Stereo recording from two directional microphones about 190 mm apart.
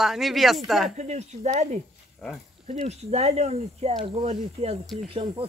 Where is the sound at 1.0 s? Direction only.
35° right (ahead or behind).